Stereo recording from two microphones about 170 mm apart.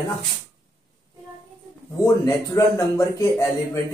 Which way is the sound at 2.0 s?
20° left (ahead or behind).